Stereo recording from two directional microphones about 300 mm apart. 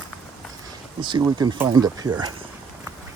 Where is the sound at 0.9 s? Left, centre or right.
Centre.